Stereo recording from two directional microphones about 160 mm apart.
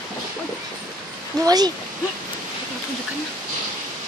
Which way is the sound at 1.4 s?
25° right (ahead or behind).